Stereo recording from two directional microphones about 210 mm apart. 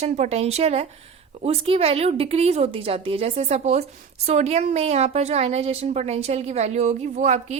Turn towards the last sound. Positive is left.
turn(degrees=-35)  # may be behind; listen again after turning